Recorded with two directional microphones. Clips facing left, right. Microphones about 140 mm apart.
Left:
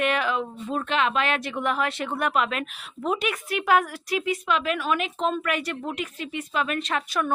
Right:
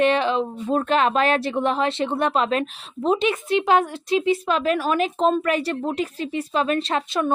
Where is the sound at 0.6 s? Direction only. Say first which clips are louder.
Right 6 dB; 40° right (ahead or behind).